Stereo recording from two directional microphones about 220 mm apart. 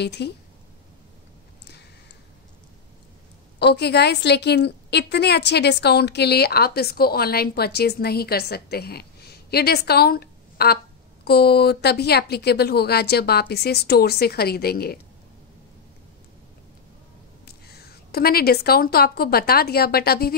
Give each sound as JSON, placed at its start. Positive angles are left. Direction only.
{"t": 0.0, "sound": "a woman's voice", "side_deg": 50}
{"t": 3.5, "sound": "a woman's voice", "side_deg": 50}
{"t": 17.5, "sound": "a woman's voice", "side_deg": 45}